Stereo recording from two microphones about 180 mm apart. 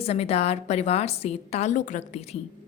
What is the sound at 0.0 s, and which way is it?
A woman's voice, 35° left (ahead or behind).